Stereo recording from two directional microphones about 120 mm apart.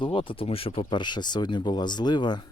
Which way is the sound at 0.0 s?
45° left (ahead or behind).